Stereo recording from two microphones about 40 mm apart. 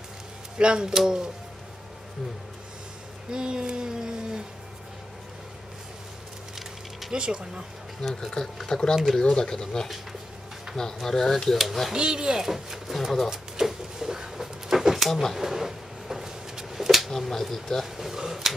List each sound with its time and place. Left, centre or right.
0.6 s speech: right
3.3 s speech: centre
7.1 s speech: centre
8.0 s speech: centre
8.9 s speech: centre
9.2 s speech: centre
11.9 s speech: centre
13.3 s a sound: centre
17.3 s speech: centre
17.8 s speech: centre